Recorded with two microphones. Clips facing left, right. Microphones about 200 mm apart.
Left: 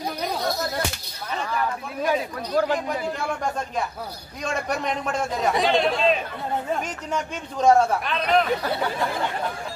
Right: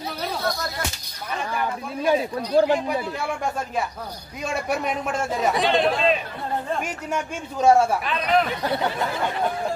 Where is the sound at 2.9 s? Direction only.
5° right (ahead or behind).